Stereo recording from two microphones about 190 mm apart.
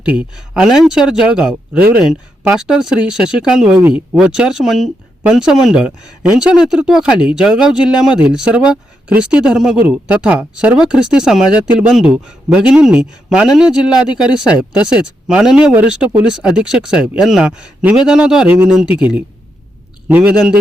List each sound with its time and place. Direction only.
0.0 s a man's voice: 5° right (ahead or behind)